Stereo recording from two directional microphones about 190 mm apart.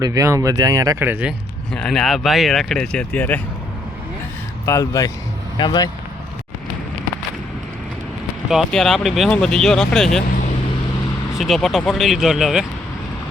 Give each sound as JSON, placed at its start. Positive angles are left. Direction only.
{"t": 0.0, "sound": "speech", "side_deg": -15}
{"t": 1.7, "sound": "speech", "side_deg": 5}
{"t": 4.6, "sound": "speech", "side_deg": 15}
{"t": 8.4, "sound": "speech", "side_deg": 0}
{"t": 11.3, "sound": "speech", "side_deg": 0}